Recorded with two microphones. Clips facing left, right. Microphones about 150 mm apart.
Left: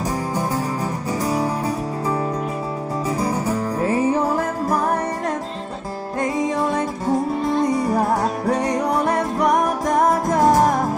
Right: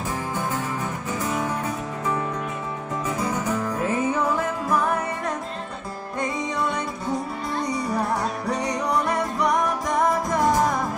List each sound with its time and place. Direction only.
1.2 s music: 35° left (ahead or behind)
3.1 s music: 35° left (ahead or behind)
6.6 s music: 45° left (ahead or behind)